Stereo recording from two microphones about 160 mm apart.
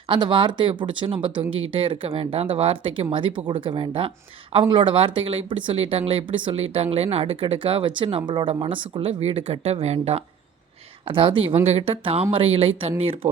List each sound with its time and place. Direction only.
0.1 s speech: 30° right (ahead or behind)